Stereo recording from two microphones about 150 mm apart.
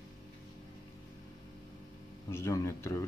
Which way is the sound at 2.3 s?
15° left (ahead or behind).